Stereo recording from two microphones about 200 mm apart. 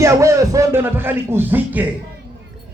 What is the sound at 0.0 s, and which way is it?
A man's voice, 15° right (ahead or behind).